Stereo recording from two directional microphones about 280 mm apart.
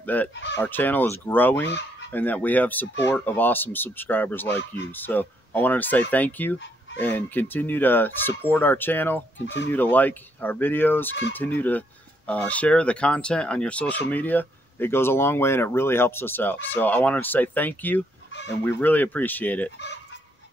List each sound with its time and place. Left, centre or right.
0.0 s speech: centre
0.3 s speech: left
0.6 s speech: centre
1.7 s fowl: left
2.0 s speech: centre
9.4 s speech: left
9.7 s speech: centre